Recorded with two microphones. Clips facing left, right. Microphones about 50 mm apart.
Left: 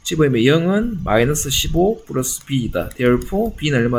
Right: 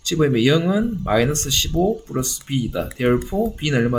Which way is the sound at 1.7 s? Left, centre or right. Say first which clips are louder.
Left 4 dB; left.